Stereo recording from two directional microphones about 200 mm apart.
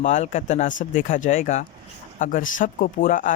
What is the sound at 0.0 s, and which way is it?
Speech, 35° left (ahead or behind).